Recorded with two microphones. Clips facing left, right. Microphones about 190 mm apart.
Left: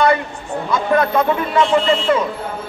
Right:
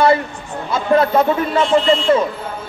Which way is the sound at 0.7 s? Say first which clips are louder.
Right 2 dB; 30° right (ahead or behind).